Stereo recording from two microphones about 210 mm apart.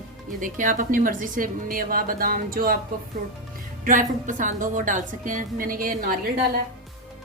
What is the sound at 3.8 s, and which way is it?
A woman's voice, 40° right (ahead or behind).